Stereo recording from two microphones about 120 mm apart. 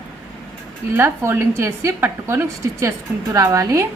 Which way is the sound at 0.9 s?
20° right (ahead or behind).